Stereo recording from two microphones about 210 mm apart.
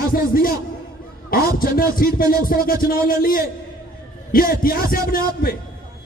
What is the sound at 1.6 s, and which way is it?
Speech, 45° left (ahead or behind).